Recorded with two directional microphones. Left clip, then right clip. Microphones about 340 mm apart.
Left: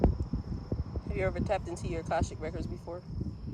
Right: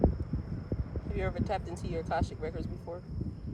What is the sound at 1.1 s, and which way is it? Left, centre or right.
Speech, left.